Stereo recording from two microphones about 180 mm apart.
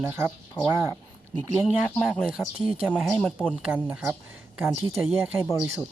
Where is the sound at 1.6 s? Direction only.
Centre (ahead or behind).